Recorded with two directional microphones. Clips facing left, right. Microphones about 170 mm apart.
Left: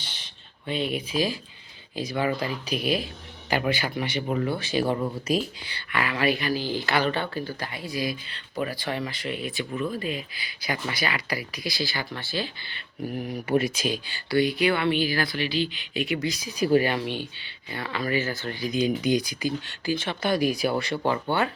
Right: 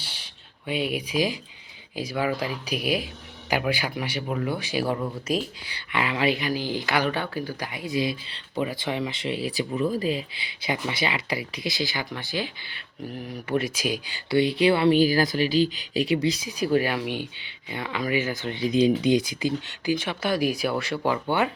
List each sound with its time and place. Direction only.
0.0 s a sound: 10° right (ahead or behind)
0.7 s speech: 10° right (ahead or behind)
4.9 s speech: 10° left (ahead or behind)
5.6 s speech: 15° right (ahead or behind)
16.7 s speech: 5° right (ahead or behind)
21.1 s speech: 15° right (ahead or behind)